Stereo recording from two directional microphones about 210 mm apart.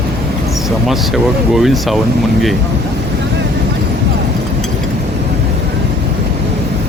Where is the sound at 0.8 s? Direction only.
Centre (ahead or behind).